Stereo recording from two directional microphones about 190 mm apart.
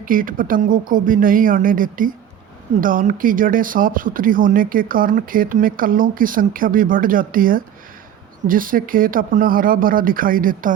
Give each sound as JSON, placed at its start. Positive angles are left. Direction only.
{"t": 0.0, "sound": "speech", "side_deg": -45}